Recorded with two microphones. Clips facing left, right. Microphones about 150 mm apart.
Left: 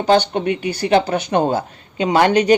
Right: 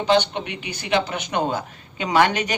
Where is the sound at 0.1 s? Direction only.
45° left (ahead or behind).